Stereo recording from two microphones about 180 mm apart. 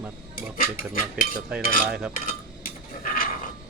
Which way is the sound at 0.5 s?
50° left (ahead or behind).